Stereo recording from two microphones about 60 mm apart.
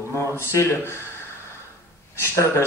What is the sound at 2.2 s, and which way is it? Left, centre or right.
Speech, left.